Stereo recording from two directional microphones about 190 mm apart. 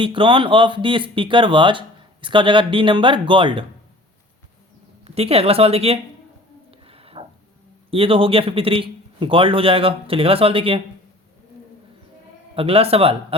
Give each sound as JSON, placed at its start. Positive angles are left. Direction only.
{"t": 0.0, "sound": "a man's voice", "side_deg": -25}
{"t": 5.0, "sound": "speech", "side_deg": -30}
{"t": 6.7, "sound": "a sound", "side_deg": -30}
{"t": 7.9, "sound": "a man's voice", "side_deg": -30}
{"t": 12.5, "sound": "a man's voice", "side_deg": -30}